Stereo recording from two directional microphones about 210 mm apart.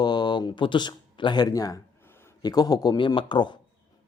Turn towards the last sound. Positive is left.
turn(degrees=20)  # may be behind; listen again after turning